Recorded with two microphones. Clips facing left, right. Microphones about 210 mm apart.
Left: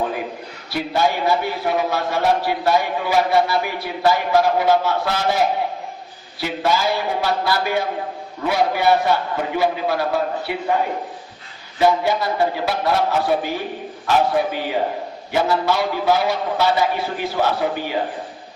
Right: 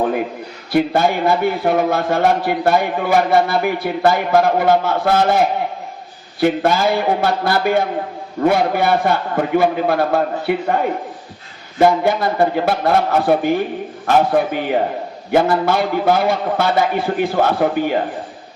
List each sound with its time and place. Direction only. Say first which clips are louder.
0.7 s a man's voice: right 5 dB; 55° right (ahead or behind)
6.4 s a man's voice: right 6 dB; 55° right (ahead or behind)
11.8 s a man's voice: right 3 dB; 55° right (ahead or behind)